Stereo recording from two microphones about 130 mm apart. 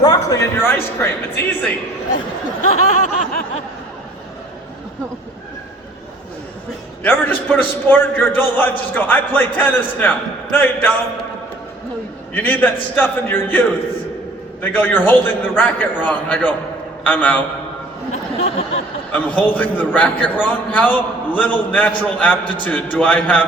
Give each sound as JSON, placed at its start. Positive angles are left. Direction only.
{"t": 0.0, "sound": "a man's voice", "side_deg": 30}
{"t": 2.6, "sound": "a sound", "side_deg": 70}
{"t": 7.0, "sound": "a man's voice", "side_deg": 10}
{"t": 12.3, "sound": "a man's voice", "side_deg": 15}
{"t": 18.1, "sound": "a sound", "side_deg": 55}
{"t": 19.1, "sound": "a man's voice", "side_deg": 10}